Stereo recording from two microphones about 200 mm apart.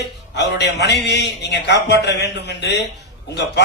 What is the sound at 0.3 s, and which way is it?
A man's voice, 60° left (ahead or behind).